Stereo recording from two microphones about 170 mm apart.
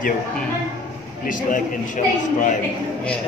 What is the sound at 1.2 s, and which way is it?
Speech, 50° left (ahead or behind).